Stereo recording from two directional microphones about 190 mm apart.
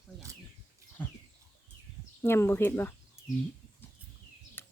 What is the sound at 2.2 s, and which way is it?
Speech, 15° left (ahead or behind).